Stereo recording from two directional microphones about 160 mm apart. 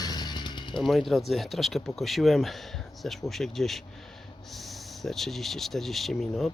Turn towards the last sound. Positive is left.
turn(degrees=0)  # may be behind; listen again after turning